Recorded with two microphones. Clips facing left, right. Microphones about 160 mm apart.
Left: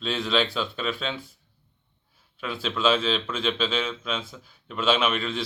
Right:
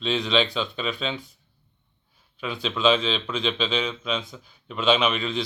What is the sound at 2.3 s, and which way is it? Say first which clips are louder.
A man's voice: right 1 dB; centre (ahead or behind).